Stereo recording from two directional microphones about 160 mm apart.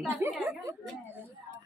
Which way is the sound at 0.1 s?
15° right (ahead or behind).